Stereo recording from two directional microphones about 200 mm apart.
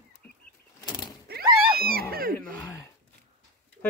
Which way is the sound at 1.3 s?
50° right (ahead or behind).